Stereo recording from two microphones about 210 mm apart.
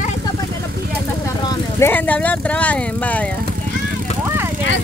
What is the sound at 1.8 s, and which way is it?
Speech, 10° left (ahead or behind).